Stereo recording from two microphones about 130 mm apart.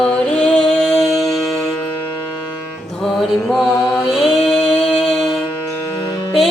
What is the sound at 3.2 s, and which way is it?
Music, centre (ahead or behind).